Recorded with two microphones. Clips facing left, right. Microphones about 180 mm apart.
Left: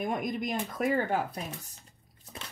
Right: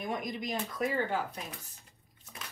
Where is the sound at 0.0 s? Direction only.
50° left (ahead or behind).